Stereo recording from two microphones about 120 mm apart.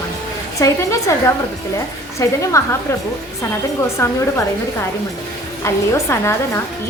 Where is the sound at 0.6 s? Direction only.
25° left (ahead or behind).